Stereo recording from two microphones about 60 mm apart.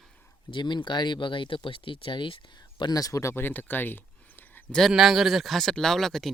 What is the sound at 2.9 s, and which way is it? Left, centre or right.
Speech, left.